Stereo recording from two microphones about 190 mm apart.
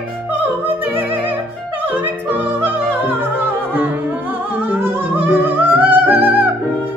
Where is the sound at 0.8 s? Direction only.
10° right (ahead or behind).